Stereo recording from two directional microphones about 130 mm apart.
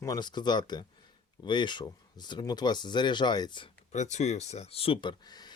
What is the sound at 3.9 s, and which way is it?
Speech, 65° left (ahead or behind).